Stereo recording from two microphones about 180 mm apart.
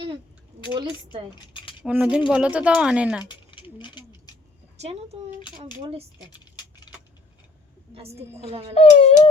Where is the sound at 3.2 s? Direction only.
25° left (ahead or behind).